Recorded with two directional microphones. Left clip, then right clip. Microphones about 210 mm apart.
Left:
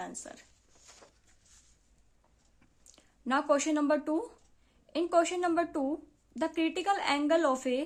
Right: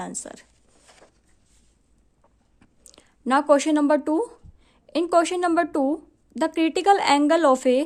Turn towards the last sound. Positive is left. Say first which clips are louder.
# right 10 dB
turn(degrees=-45)  # may be behind; listen again after turning